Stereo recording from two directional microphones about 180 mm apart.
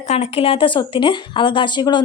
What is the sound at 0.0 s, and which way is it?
Speech, 40° left (ahead or behind).